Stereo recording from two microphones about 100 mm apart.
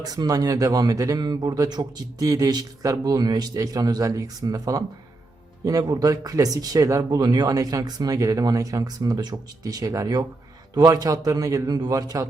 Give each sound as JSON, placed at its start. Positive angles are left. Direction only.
{"t": 0.0, "sound": "speech", "side_deg": -40}